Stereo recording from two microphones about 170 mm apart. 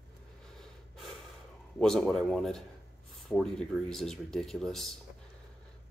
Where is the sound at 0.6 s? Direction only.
Centre (ahead or behind).